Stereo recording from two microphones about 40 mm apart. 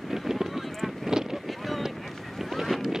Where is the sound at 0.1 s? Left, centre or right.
Centre.